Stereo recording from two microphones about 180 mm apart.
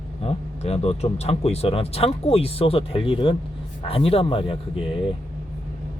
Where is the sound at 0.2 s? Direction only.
35° left (ahead or behind).